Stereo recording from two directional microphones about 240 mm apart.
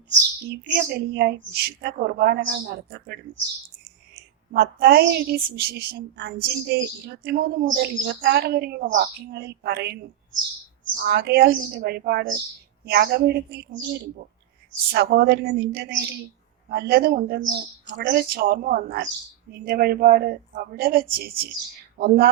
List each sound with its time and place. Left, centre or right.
0.1 s a woman's voice: right
4.5 s a woman's voice: right